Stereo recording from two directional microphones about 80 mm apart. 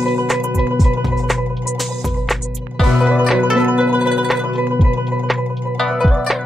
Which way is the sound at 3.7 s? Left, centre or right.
Centre.